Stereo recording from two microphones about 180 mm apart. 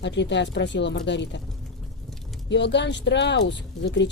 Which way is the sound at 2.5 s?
75° left (ahead or behind).